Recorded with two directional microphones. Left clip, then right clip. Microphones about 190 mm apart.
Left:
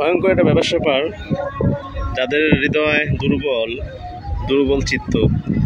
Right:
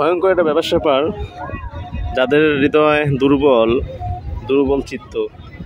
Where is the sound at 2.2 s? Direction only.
25° right (ahead or behind).